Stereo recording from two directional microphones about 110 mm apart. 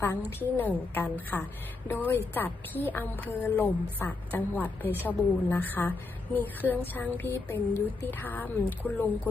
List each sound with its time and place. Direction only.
0.3 s a woman's voice: 20° left (ahead or behind)